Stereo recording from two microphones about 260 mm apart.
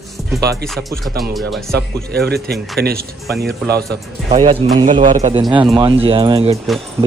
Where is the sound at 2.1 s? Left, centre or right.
Right.